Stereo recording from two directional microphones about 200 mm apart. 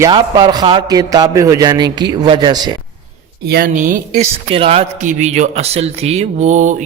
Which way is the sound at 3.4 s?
50° right (ahead or behind).